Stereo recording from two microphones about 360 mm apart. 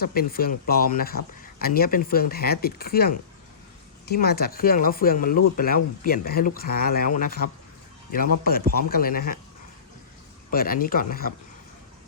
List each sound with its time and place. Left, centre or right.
0.0 s speech: left
10.5 s speech: left